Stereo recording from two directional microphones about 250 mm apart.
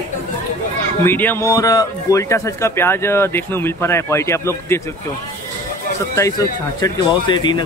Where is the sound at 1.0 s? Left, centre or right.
Centre.